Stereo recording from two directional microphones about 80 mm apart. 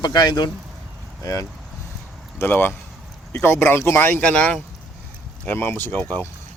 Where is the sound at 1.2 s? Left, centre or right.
Left.